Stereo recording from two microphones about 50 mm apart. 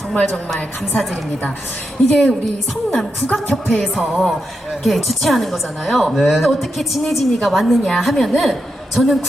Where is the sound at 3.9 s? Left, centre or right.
Centre.